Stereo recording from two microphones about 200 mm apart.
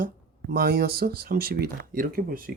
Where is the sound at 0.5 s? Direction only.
50° right (ahead or behind).